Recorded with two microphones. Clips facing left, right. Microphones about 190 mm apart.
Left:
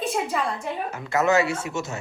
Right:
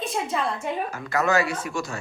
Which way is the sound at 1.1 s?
20° left (ahead or behind).